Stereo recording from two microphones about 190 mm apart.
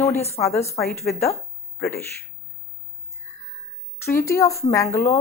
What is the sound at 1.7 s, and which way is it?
Speech, 55° left (ahead or behind).